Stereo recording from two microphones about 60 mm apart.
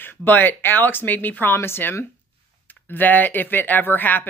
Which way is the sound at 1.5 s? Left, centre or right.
Left.